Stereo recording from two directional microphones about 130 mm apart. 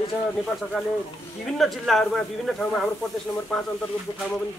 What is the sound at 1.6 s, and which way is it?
Speech, centre (ahead or behind).